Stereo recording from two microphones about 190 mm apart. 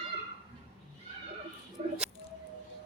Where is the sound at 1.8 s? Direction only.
35° right (ahead or behind).